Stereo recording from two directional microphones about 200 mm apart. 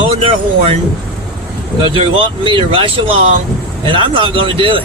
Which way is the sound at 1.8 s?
25° right (ahead or behind).